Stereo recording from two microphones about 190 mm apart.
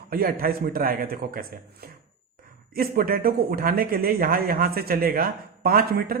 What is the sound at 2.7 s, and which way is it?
A man's voice, 50° right (ahead or behind).